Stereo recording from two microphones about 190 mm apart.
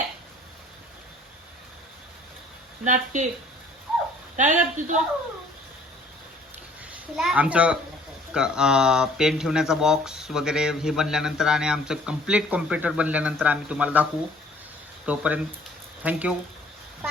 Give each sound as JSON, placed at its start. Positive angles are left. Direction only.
{"t": 2.8, "sound": "speech", "side_deg": -40}
{"t": 4.4, "sound": "speech", "side_deg": -40}
{"t": 6.9, "sound": "a child's voice", "side_deg": -5}